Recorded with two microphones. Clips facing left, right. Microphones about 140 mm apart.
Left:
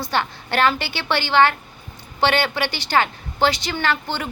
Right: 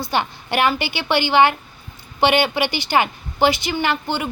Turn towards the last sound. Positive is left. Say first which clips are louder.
# right 2 dB
turn(degrees=-15)  # may be behind; listen again after turning